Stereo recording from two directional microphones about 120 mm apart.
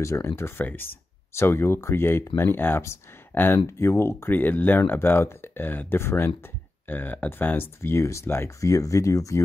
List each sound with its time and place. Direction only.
0.0 s speech: 25° left (ahead or behind)